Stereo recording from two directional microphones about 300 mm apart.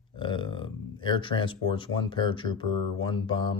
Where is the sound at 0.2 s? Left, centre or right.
Centre.